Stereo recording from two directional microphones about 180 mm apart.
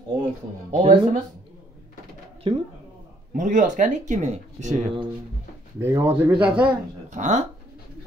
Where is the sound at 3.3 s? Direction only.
45° right (ahead or behind).